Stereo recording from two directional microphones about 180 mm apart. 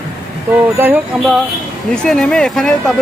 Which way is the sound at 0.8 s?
10° right (ahead or behind).